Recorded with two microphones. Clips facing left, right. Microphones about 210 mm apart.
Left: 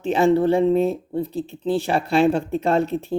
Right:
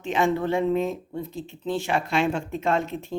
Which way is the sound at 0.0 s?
35° left (ahead or behind).